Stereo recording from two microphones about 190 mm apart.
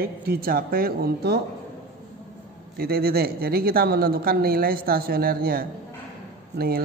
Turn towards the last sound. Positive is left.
turn(degrees=-55)  # may be behind; listen again after turning